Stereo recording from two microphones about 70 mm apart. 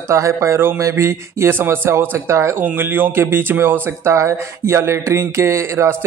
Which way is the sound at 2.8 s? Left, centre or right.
Right.